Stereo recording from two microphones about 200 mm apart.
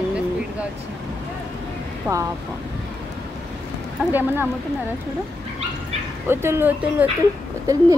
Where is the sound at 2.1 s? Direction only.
10° right (ahead or behind).